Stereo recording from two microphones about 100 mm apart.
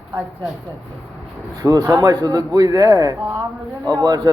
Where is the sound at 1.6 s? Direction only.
35° right (ahead or behind).